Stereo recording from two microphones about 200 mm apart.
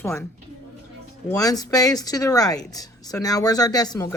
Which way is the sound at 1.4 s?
20° left (ahead or behind).